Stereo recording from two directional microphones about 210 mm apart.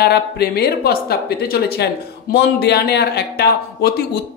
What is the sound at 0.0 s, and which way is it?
Speech, 50° left (ahead or behind).